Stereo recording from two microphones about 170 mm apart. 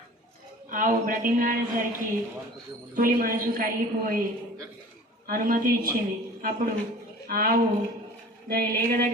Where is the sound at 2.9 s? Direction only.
55° right (ahead or behind).